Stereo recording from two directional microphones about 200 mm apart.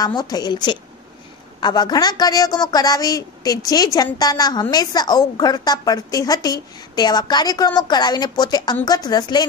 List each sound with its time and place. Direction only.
0.0 s a woman's voice: 20° left (ahead or behind)